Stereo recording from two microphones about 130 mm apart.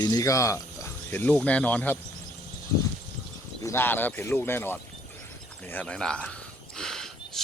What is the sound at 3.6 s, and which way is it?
Speech, 20° left (ahead or behind).